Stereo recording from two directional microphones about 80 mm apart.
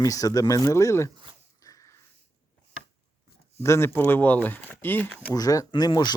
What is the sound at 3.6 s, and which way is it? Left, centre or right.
Speech, left.